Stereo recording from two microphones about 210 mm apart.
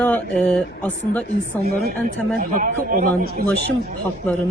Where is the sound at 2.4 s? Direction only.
40° right (ahead or behind).